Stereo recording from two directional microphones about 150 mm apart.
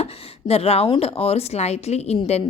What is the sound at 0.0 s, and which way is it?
Speech, 40° left (ahead or behind).